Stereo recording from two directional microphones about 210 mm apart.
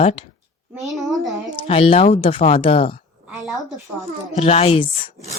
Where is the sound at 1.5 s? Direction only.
25° left (ahead or behind).